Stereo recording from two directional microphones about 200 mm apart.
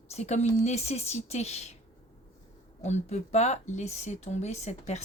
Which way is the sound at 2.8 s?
35° left (ahead or behind).